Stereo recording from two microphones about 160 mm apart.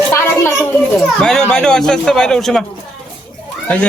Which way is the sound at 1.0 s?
5° left (ahead or behind).